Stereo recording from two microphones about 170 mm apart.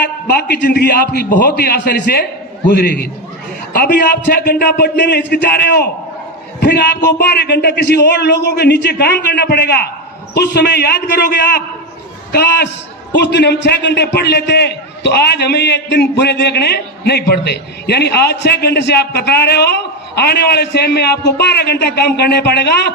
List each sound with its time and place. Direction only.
0.3 s a man's voice: 70° left (ahead or behind)
13.1 s a man's voice: 85° left